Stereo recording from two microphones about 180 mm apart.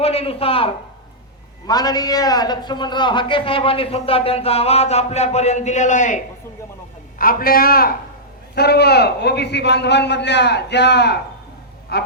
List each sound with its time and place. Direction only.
0.0 s a man's voice: 35° left (ahead or behind)
1.6 s a man's voice: 20° left (ahead or behind); by 12.1 s 60° left (ahead or behind)